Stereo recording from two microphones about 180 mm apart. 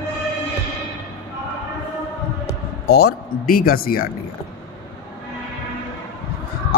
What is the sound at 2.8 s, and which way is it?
Speech, 60° left (ahead or behind).